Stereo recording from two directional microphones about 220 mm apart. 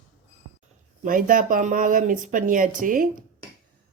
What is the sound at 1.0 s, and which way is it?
Speech, 40° right (ahead or behind).